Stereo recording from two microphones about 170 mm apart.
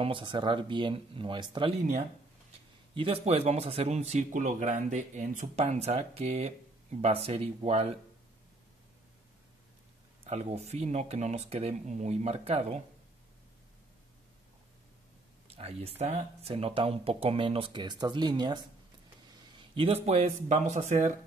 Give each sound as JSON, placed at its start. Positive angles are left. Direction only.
{"t": 0.0, "sound": "speech", "side_deg": -30}
{"t": 2.9, "sound": "speech", "side_deg": -35}
{"t": 10.2, "sound": "speech", "side_deg": -40}
{"t": 15.5, "sound": "speech", "side_deg": -35}